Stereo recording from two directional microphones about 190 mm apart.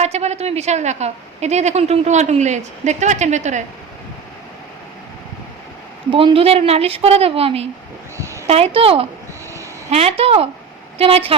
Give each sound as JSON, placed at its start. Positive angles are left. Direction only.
{"t": 0.0, "sound": "a woman's voice", "side_deg": -35}
{"t": 6.1, "sound": "a woman's voice", "side_deg": -30}